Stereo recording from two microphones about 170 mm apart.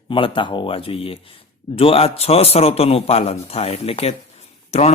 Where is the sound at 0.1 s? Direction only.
30° left (ahead or behind).